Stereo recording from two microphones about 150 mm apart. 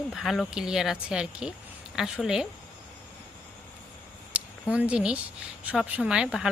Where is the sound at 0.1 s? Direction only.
Centre (ahead or behind).